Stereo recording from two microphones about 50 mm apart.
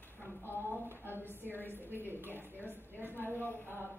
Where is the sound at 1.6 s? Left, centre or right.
Left.